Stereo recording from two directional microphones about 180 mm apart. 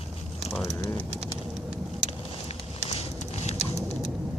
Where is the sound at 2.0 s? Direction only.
35° left (ahead or behind).